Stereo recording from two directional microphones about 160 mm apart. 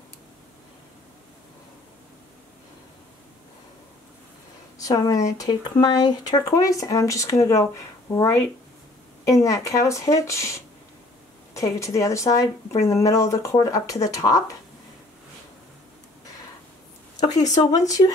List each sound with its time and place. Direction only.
4.7 s speech: 20° left (ahead or behind)
17.6 s speech: 25° left (ahead or behind)